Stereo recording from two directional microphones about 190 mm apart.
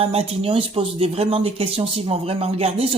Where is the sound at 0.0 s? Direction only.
30° right (ahead or behind).